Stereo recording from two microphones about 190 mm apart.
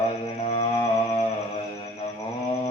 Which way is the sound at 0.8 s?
25° left (ahead or behind).